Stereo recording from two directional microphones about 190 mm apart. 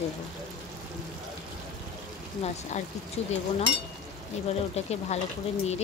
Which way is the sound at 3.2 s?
35° left (ahead or behind).